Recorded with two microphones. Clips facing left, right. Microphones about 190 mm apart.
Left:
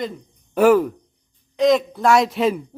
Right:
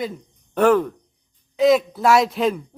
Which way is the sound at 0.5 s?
10° left (ahead or behind).